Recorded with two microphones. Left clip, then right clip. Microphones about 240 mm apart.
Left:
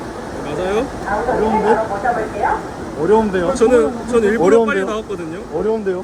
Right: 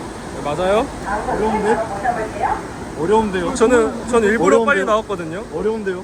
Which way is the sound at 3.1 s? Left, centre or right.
Centre.